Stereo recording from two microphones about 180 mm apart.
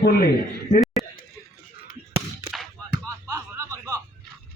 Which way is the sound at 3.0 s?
15° right (ahead or behind).